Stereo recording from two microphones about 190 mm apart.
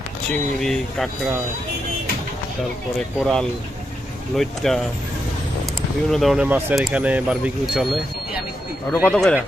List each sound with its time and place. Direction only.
0.3 s speech: centre (ahead or behind)
3.2 s speech: centre (ahead or behind)
6.1 s speech: centre (ahead or behind)
8.9 s speech: 5° left (ahead or behind)